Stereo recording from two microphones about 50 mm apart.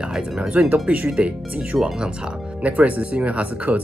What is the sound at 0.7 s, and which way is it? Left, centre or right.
Speech, right.